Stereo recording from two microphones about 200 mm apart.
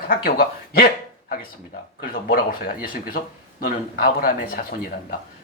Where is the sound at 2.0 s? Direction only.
45° left (ahead or behind).